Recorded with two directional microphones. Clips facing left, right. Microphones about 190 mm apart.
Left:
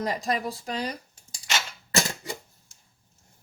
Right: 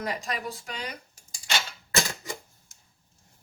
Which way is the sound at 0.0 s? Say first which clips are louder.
Left 4 dB; 35° left (ahead or behind).